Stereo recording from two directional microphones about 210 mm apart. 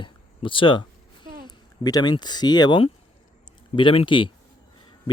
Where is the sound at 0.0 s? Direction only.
25° left (ahead or behind).